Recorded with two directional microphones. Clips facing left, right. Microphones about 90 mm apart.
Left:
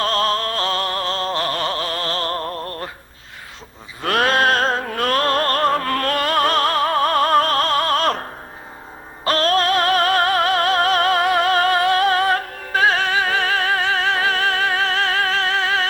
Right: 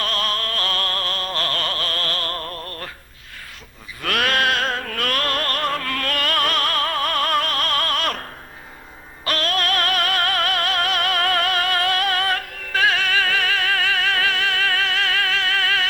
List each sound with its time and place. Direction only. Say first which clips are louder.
0.0 s opera: left 6 dB; 30° left (ahead or behind)
4.0 s music: left 4 dB; 30° left (ahead or behind)